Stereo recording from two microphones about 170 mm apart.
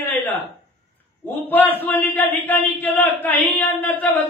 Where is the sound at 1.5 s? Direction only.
10° left (ahead or behind).